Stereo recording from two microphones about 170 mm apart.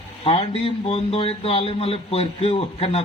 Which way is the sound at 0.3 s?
35° left (ahead or behind).